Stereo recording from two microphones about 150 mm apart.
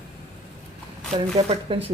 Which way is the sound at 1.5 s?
40° right (ahead or behind).